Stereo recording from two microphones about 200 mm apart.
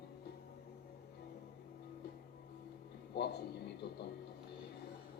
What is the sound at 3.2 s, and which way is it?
Speech, 55° left (ahead or behind).